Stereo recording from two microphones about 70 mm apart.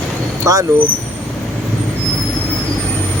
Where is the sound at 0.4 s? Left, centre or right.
Right.